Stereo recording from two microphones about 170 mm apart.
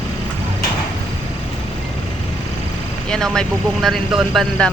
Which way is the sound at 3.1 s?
5° left (ahead or behind).